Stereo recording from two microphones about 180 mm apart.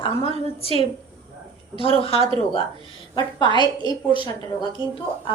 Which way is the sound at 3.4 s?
25° right (ahead or behind).